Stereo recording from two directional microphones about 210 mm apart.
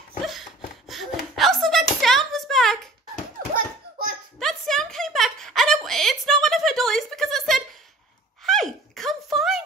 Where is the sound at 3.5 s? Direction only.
40° right (ahead or behind).